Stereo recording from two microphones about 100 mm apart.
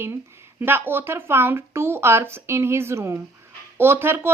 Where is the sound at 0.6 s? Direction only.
20° right (ahead or behind).